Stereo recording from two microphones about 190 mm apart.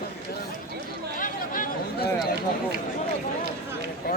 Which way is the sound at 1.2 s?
45° left (ahead or behind).